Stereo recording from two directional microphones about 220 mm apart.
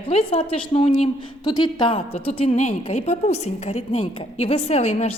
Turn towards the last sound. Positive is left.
turn(degrees=30)  # may be behind; listen again after turning